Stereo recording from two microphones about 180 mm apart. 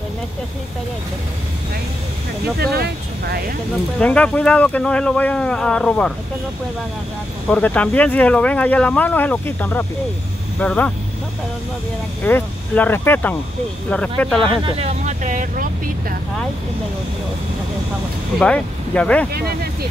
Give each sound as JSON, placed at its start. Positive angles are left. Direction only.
{"t": 2.6, "sound": "speech", "side_deg": -60}
{"t": 4.0, "sound": "speech", "side_deg": 5}
{"t": 7.4, "sound": "speech", "side_deg": 5}
{"t": 12.3, "sound": "speech", "side_deg": 10}
{"t": 14.6, "sound": "speech", "side_deg": -30}
{"t": 18.4, "sound": "speech", "side_deg": 5}
{"t": 19.3, "sound": "speech", "side_deg": -60}